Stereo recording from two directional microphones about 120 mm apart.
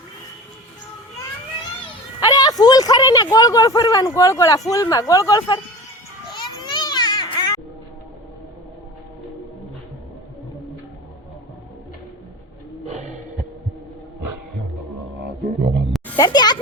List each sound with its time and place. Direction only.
2.2 s a woman's voice: 30° left (ahead or behind)
6.3 s a sound: 40° left (ahead or behind)
12.8 s snort: 75° right (ahead or behind)
16.1 s music: 35° left (ahead or behind)